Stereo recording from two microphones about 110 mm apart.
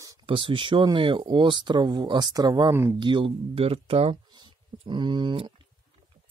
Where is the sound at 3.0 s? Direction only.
50° right (ahead or behind).